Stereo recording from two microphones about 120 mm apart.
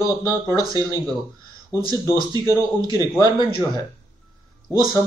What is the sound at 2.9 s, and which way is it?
Speech, 35° left (ahead or behind).